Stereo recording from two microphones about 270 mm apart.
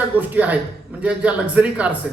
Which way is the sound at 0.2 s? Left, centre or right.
Centre.